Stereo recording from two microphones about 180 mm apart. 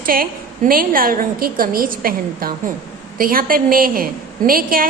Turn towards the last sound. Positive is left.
turn(degrees=-55)  # may be behind; listen again after turning